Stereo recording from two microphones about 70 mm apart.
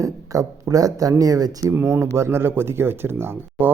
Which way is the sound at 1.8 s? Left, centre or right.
Right.